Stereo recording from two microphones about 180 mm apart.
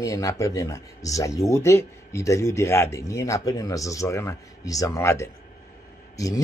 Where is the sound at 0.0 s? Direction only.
15° left (ahead or behind).